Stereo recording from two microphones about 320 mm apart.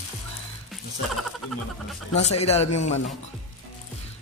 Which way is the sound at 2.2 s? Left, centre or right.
Centre.